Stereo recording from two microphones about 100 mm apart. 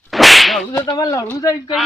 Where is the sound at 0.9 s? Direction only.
35° left (ahead or behind).